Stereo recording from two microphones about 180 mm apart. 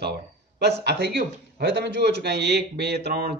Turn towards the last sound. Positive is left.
turn(degrees=-65)  # may be behind; listen again after turning